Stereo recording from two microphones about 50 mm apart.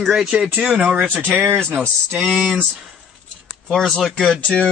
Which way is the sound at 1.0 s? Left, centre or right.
Right.